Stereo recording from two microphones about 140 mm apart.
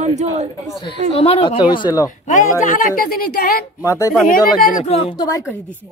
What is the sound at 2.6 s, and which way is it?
A woman's voice, 75° left (ahead or behind).